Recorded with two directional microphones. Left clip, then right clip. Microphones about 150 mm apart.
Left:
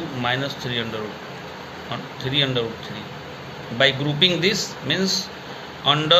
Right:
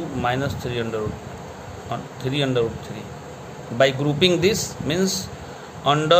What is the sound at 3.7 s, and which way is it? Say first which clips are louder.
A man's voice: even; 85° right.